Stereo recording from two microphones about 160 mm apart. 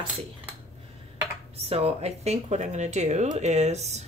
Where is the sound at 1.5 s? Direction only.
40° right (ahead or behind).